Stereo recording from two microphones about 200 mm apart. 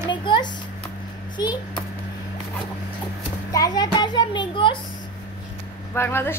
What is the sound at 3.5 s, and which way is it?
A child's voice, 20° left (ahead or behind).